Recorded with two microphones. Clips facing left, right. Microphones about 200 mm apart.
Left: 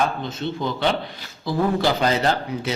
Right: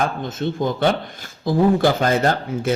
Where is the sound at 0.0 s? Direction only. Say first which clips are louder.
Right 2 dB; 50° right (ahead or behind).